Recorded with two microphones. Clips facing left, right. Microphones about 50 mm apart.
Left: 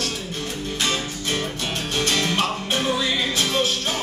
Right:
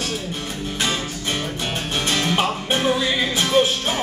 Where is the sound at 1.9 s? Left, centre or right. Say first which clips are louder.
Right 1 dB; centre.